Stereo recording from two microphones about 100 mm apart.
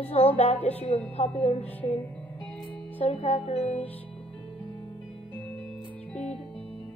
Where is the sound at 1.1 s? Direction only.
75° left (ahead or behind).